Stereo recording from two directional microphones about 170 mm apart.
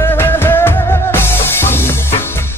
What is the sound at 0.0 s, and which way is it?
Music, 15° left (ahead or behind).